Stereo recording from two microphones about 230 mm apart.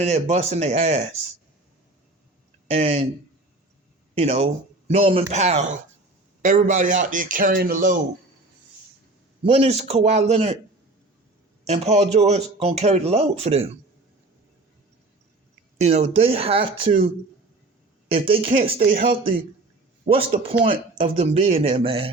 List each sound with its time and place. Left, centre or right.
0.0 s speech: right
2.6 s speech: right
4.2 s a man's voice: right
9.5 s speech: right
11.6 s speech: right
15.8 s speech: right
18.1 s speech: right
20.1 s speech: right